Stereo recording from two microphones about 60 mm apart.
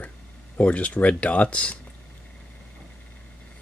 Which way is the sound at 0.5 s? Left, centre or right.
Left.